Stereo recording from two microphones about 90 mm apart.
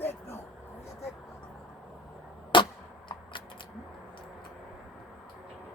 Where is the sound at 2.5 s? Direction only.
65° left (ahead or behind).